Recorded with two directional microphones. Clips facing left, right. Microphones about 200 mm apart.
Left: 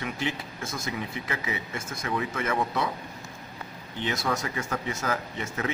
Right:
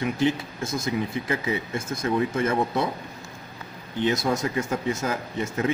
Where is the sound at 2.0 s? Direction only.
30° right (ahead or behind).